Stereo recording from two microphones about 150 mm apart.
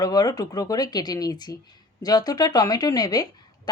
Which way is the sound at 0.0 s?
25° left (ahead or behind).